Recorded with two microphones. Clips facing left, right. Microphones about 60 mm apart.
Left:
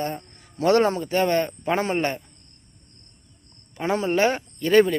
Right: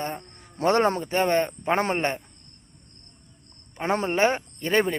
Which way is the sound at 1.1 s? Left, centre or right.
Right.